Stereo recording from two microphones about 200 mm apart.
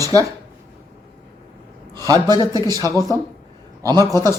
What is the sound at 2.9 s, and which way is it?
Speech, 15° left (ahead or behind).